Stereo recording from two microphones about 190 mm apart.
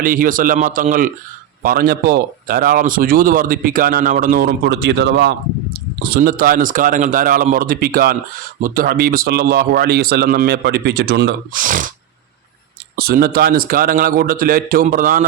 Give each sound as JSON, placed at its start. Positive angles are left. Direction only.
{"t": 0.0, "sound": "speech", "side_deg": -45}
{"t": 11.6, "sound": "speech", "side_deg": -45}
{"t": 13.0, "sound": "speech", "side_deg": -55}